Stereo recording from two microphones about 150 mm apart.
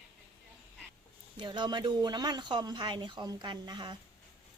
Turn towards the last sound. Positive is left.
turn(degrees=-30)  # may be behind; listen again after turning